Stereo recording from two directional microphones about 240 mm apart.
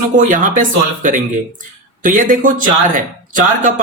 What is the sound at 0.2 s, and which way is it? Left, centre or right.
Speech, right.